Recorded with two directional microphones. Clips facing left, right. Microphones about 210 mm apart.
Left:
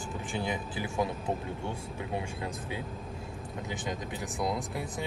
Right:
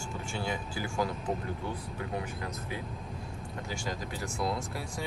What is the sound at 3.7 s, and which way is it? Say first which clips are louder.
Speech: left 1 dB; 20° left (ahead or behind).